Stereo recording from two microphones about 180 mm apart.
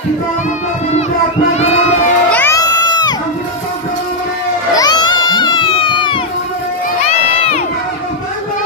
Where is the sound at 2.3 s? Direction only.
15° left (ahead or behind).